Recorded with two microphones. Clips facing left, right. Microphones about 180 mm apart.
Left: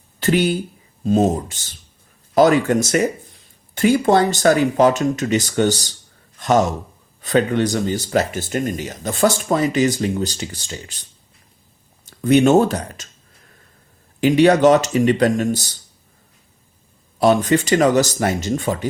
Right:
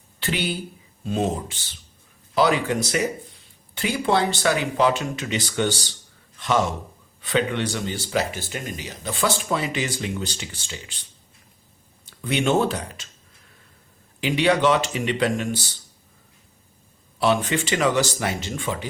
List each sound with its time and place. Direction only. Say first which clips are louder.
0.2 s speech: left 9 dB; 45° left (ahead or behind)
12.1 s speech: left 8 dB; 45° left (ahead or behind)
14.2 s speech: left 7 dB; 45° left (ahead or behind)
17.2 s speech: left 6 dB; 40° left (ahead or behind)